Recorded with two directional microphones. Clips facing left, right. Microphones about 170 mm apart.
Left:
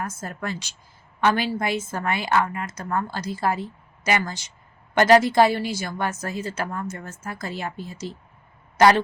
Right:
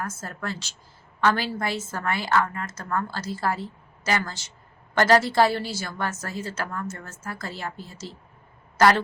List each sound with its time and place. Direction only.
0.0 s a woman's voice: 15° left (ahead or behind)